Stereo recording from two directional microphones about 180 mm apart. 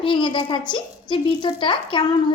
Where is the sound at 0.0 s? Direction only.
25° left (ahead or behind).